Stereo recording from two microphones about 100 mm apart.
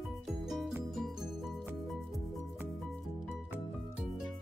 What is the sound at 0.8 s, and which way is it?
Music, centre (ahead or behind).